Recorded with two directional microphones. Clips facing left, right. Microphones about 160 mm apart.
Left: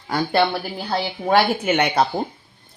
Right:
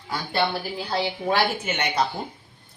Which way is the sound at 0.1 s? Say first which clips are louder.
Left 6 dB; 65° left (ahead or behind).